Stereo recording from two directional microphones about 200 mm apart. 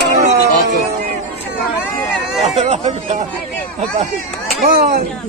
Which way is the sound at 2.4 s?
35° right (ahead or behind).